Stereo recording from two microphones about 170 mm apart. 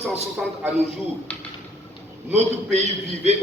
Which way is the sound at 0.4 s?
5° right (ahead or behind).